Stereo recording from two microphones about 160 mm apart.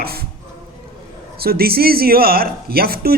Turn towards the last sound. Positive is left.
turn(degrees=-70)  # may be behind; listen again after turning